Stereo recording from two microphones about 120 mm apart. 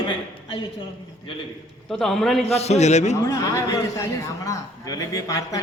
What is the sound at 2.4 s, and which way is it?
Speech, 60° left (ahead or behind).